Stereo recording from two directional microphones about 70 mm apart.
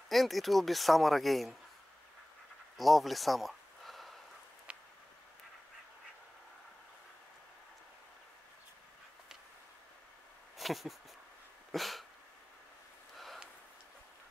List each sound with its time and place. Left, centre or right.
0.1 s speech: centre
2.8 s speech: centre
4.7 s a sound: centre
10.6 s speech: centre
11.7 s dog: centre